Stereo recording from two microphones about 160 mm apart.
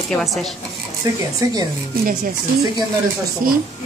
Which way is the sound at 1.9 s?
60° right (ahead or behind).